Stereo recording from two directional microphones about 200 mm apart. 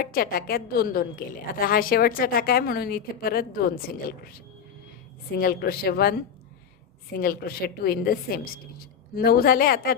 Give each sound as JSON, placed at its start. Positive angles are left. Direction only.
{"t": 0.0, "sound": "a woman's voice", "side_deg": 45}
{"t": 5.4, "sound": "a woman's voice", "side_deg": 50}
{"t": 7.2, "sound": "a woman's voice", "side_deg": 50}